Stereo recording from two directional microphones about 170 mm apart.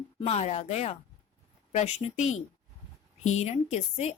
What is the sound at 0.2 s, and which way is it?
A woman's voice, 40° left (ahead or behind).